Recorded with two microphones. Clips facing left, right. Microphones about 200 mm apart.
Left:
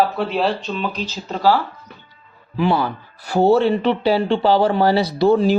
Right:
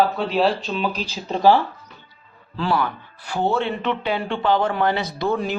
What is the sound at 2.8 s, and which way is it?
Speech, 40° left (ahead or behind).